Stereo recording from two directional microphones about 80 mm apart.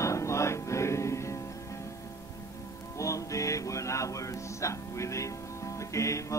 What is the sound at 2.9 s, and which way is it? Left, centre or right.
Music, left.